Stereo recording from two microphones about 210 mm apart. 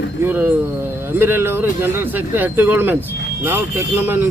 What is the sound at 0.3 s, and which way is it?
Speech, 10° right (ahead or behind).